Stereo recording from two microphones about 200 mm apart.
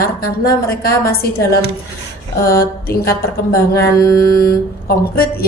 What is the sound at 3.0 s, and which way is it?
Speech, 15° left (ahead or behind).